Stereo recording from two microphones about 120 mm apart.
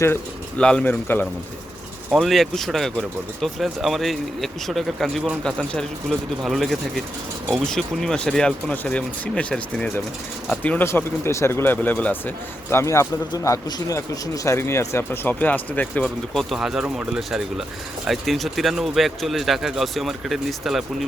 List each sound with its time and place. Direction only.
0.6 s speech: 10° left (ahead or behind)
2.1 s speech: centre (ahead or behind)
12.7 s speech: 25° left (ahead or behind)
16.4 s speech: centre (ahead or behind)